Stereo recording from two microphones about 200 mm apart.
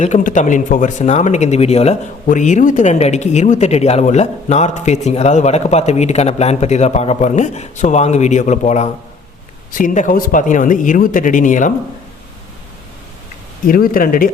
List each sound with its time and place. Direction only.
0.0 s speech: 40° left (ahead or behind)
13.7 s speech: 45° left (ahead or behind)